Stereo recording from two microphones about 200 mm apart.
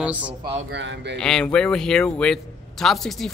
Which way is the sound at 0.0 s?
5° right (ahead or behind).